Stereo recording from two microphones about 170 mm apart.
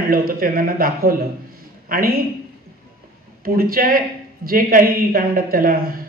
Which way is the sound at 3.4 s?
60° right (ahead or behind).